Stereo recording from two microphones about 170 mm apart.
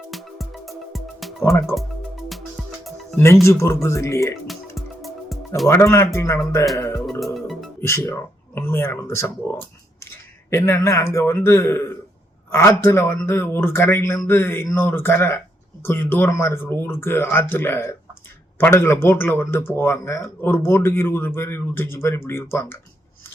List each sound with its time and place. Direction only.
0.1 s music: centre (ahead or behind)
1.7 s speech: 15° left (ahead or behind)
3.4 s speech: 15° left (ahead or behind)
5.6 s speech: 15° left (ahead or behind)
7.0 s music: centre (ahead or behind)
7.8 s speech: 15° left (ahead or behind)
10.5 s speech: 15° left (ahead or behind)